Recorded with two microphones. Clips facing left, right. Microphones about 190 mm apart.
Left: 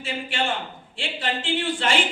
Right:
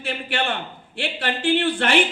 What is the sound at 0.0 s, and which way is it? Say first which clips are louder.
A man's voice: right 2 dB; 65° right (ahead or behind).